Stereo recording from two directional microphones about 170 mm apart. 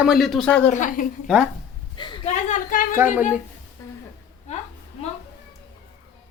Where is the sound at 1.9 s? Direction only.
25° left (ahead or behind).